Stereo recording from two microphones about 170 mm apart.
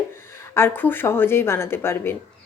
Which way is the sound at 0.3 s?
15° left (ahead or behind).